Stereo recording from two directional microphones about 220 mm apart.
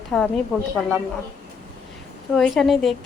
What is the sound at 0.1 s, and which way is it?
Speech, centre (ahead or behind).